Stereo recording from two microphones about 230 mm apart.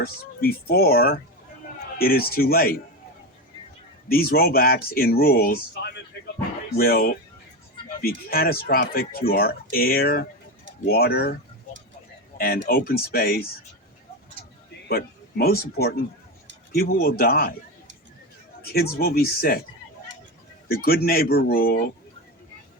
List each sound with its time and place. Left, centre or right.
0.0 s speech: left
4.1 s speech: left
8.3 s speech: left
12.6 s speech: left
14.8 s speech: left
18.6 s speech: left
20.7 s speech: left